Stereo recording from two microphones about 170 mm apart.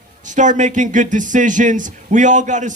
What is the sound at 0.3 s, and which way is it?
Speech, 45° right (ahead or behind).